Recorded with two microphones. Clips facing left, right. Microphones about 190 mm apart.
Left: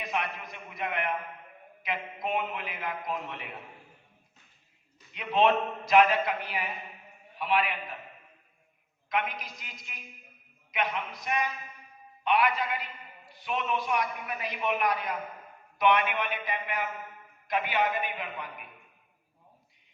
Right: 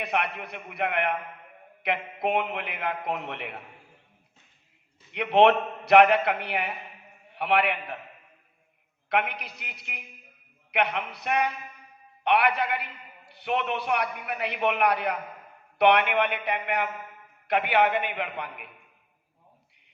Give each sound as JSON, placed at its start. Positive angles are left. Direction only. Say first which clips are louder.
{"t": 0.0, "sound": "a man's voice", "louder": "right 4 dB", "side_deg": -65}
{"t": 5.1, "sound": "a man's voice", "louder": "right 5 dB", "side_deg": -65}
{"t": 9.0, "sound": "a man's voice", "louder": "right 4 dB", "side_deg": -65}